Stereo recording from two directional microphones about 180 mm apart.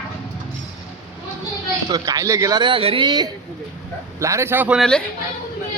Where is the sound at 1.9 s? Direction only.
20° right (ahead or behind).